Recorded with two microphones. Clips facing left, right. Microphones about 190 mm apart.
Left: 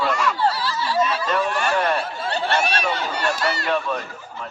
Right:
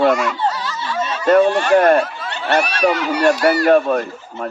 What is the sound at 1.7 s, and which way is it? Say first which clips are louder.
Goose: right 12 dB; 55° right (ahead or behind).